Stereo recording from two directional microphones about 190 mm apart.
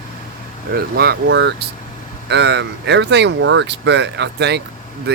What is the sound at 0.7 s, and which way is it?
Speech, 55° right (ahead or behind).